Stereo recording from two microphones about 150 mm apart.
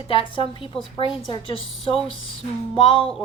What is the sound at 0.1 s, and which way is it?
A woman's voice, 35° left (ahead or behind).